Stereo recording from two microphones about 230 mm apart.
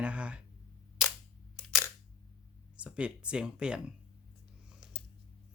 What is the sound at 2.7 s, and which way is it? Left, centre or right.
Speech, centre.